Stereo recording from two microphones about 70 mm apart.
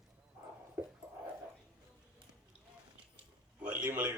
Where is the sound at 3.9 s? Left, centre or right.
Right.